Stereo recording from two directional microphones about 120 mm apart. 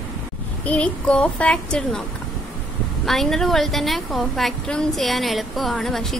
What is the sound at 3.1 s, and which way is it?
A woman's voice, centre (ahead or behind).